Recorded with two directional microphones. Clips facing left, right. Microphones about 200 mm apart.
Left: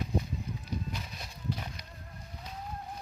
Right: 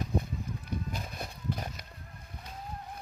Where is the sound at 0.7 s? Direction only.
50° right (ahead or behind).